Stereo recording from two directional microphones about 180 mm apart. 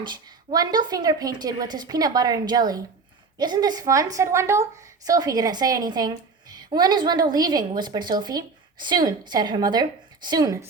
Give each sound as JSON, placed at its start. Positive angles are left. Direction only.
{"t": 0.5, "sound": "a woman's voice", "side_deg": -20}